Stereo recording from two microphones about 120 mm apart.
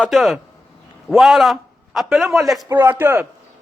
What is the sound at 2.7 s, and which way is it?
Speech, 15° right (ahead or behind).